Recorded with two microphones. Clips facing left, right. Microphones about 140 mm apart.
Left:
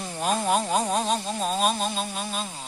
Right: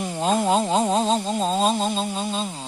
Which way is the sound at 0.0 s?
20° right (ahead or behind).